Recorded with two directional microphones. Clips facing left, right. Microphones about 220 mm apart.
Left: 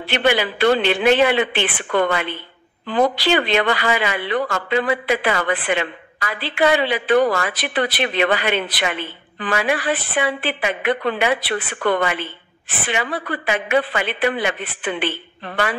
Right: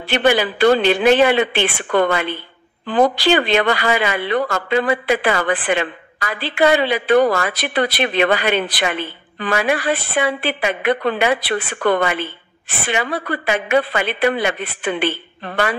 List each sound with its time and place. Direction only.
0.1 s a woman's voice: 40° right (ahead or behind)